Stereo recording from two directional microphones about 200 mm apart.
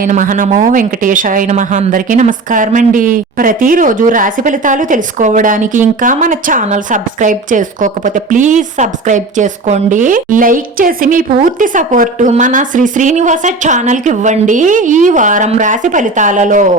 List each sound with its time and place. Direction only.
0.0 s a woman's voice: 40° right (ahead or behind)